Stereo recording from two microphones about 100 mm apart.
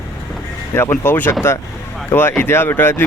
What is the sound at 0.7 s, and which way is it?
Speech, 25° left (ahead or behind).